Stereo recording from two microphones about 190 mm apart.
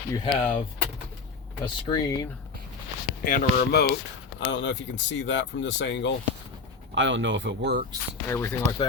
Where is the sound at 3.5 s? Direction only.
55° left (ahead or behind).